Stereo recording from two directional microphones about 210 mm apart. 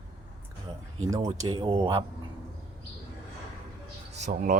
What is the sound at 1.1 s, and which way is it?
Speech, 20° right (ahead or behind).